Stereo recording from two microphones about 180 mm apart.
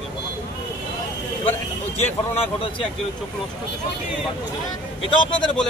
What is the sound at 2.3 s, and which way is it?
Speech, 30° left (ahead or behind).